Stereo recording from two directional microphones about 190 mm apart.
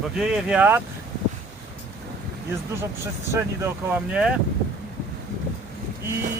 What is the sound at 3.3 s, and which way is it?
Speech, 15° right (ahead or behind).